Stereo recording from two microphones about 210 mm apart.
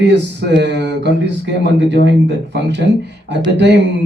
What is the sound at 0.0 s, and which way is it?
Speech, 55° right (ahead or behind).